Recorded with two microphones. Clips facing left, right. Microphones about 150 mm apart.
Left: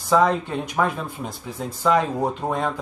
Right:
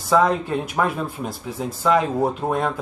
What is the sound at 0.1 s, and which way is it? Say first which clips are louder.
Speech: right 1 dB; 5° right (ahead or behind).